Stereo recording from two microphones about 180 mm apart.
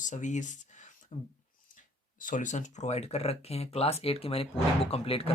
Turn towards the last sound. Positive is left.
turn(degrees=30)  # may be behind; listen again after turning